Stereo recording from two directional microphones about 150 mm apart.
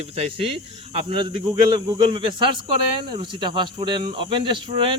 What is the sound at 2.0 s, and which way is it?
Speech, 35° right (ahead or behind).